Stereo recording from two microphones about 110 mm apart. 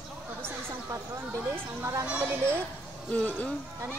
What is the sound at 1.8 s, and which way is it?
Speech, 30° right (ahead or behind).